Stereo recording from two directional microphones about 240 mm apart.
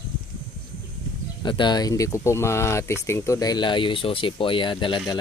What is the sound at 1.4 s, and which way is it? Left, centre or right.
Speech, centre.